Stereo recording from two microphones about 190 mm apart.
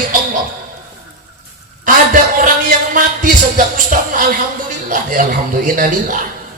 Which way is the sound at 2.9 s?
45° right (ahead or behind).